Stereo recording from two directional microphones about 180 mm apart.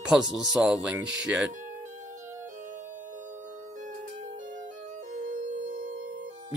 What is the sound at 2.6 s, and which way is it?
Music, 45° right (ahead or behind).